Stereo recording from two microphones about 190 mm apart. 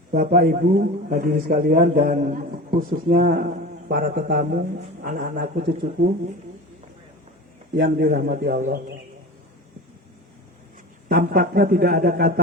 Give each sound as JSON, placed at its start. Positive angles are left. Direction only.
{"t": 0.1, "sound": "a man's voice", "side_deg": -50}
{"t": 7.8, "sound": "a man's voice", "side_deg": -55}
{"t": 11.1, "sound": "a man's voice", "side_deg": -55}